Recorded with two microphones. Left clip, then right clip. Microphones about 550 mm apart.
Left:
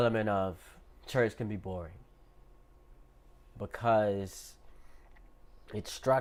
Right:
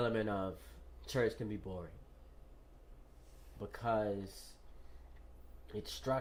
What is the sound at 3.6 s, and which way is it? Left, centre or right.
Speech, left.